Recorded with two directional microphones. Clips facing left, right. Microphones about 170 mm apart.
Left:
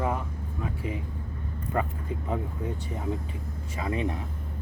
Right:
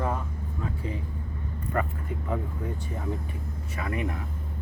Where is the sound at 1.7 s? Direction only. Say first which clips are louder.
Even; 20° left (ahead or behind).